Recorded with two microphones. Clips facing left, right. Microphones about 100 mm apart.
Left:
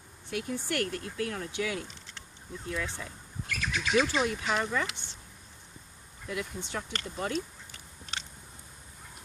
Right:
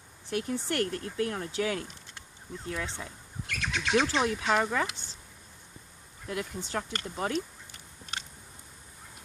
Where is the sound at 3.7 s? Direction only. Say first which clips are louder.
Even; 65° right (ahead or behind).